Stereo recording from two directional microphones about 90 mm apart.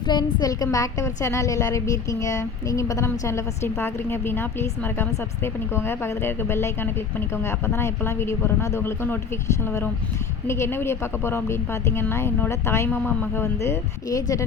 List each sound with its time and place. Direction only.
0.1 s a woman's voice: 50° left (ahead or behind)